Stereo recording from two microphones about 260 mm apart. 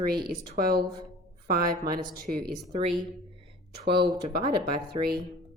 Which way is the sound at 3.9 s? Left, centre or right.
Centre.